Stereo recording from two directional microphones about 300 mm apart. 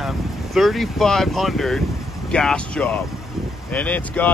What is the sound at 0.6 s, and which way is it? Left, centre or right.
Speech, centre.